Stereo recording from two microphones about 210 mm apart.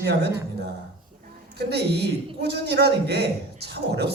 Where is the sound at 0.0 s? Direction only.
50° right (ahead or behind).